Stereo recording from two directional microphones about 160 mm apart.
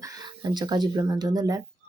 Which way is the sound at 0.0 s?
25° right (ahead or behind).